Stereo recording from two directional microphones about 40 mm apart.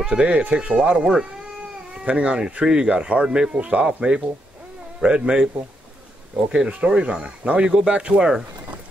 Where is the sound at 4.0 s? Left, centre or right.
Right.